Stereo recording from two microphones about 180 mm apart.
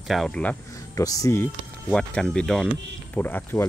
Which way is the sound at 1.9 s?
5° left (ahead or behind).